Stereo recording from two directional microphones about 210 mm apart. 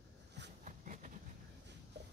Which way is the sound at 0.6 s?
35° right (ahead or behind).